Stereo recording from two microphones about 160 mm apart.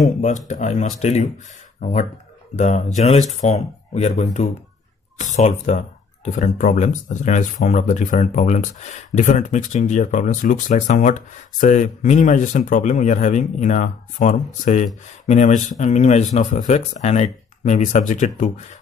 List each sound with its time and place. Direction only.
0.0 s speech: 50° left (ahead or behind)